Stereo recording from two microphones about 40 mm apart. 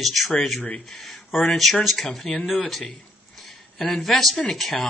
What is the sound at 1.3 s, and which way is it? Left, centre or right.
Speech, centre.